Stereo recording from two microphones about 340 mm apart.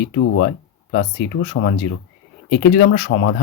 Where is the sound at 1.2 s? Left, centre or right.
Left.